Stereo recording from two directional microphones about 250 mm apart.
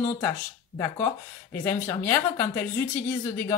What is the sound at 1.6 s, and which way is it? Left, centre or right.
Speech, centre.